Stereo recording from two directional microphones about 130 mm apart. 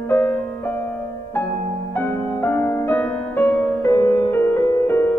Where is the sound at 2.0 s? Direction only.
15° left (ahead or behind).